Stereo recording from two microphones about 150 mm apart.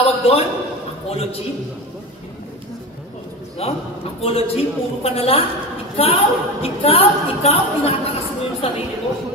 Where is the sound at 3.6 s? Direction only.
40° left (ahead or behind).